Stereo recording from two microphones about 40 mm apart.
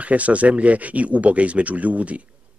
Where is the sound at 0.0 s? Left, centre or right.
Right.